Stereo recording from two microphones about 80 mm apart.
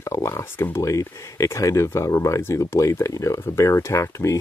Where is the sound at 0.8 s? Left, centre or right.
Left.